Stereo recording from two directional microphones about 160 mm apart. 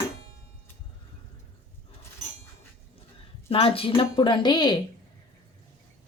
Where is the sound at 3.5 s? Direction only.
35° left (ahead or behind).